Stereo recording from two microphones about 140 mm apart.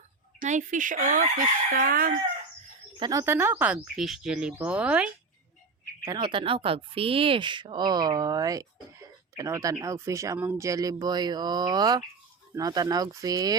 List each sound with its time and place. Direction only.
0.3 s speech: 60° right (ahead or behind); by 2.1 s 90° right
3.0 s speech: 25° right (ahead or behind); by 5.1 s 10° right (ahead or behind)
6.1 s speech: 35° right (ahead or behind)